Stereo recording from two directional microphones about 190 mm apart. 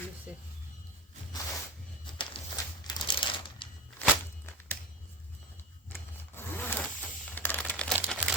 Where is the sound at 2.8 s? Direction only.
25° left (ahead or behind).